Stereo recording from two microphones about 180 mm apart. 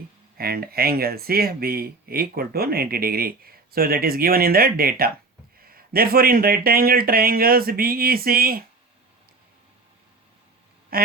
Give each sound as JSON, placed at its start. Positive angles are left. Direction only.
{"t": 0.3, "sound": "a man's voice", "side_deg": -60}
{"t": 10.9, "sound": "speech", "side_deg": -55}